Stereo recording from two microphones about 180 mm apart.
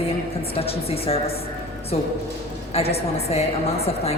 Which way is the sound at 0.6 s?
35° left (ahead or behind).